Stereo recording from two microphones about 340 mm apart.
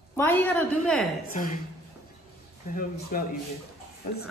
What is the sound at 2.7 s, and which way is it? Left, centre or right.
Speech, left.